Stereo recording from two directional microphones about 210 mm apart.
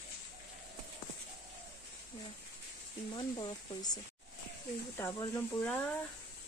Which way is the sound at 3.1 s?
20° left (ahead or behind).